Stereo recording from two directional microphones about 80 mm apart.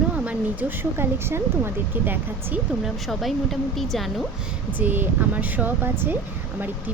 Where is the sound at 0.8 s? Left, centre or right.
Right.